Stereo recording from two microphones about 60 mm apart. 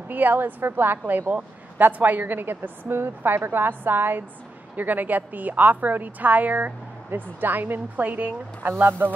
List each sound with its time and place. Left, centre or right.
0.1 s a woman's voice: right